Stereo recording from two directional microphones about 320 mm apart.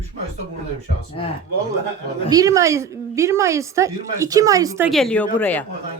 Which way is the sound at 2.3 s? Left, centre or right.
Centre.